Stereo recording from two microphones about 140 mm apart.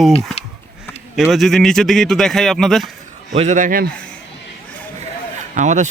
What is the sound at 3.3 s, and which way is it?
Speech, 55° right (ahead or behind).